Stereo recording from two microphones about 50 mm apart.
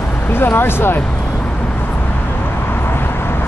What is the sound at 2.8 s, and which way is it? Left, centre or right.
Vehicle, left.